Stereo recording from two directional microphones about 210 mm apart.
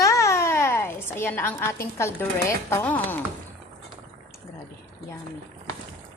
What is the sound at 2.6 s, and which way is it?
Speech, 10° left (ahead or behind).